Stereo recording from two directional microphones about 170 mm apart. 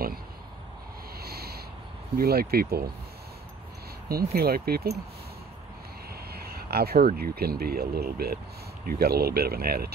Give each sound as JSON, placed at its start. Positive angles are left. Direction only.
{"t": 1.2, "sound": "a sound", "side_deg": -65}
{"t": 2.1, "sound": "speech", "side_deg": -65}
{"t": 4.1, "sound": "speech", "side_deg": -65}
{"t": 6.3, "sound": "speech", "side_deg": -65}